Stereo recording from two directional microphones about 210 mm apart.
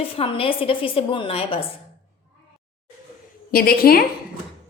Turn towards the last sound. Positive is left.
turn(degrees=45)  # may be behind; listen again after turning